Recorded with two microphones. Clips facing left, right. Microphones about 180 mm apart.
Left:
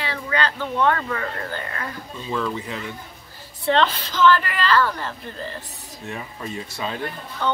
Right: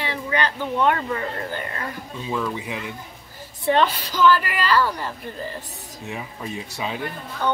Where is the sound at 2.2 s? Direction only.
10° right (ahead or behind).